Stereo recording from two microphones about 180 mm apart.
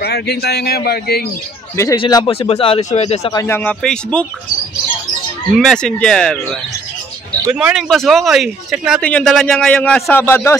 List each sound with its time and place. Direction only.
0.0 s speech: 65° left (ahead or behind)
2.0 s speech: 25° left (ahead or behind)
3.3 s speech: 10° left (ahead or behind)
5.5 s speech: centre (ahead or behind)
7.5 s speech: 5° right (ahead or behind); by 10.6 s 15° left (ahead or behind)